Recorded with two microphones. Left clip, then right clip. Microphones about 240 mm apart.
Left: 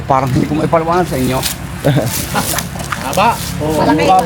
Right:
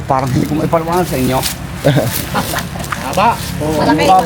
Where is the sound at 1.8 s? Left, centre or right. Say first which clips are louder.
Right 2 dB; centre.